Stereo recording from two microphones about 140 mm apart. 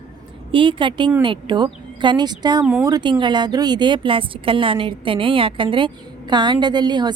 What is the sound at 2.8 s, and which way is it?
A woman's voice, 30° right (ahead or behind).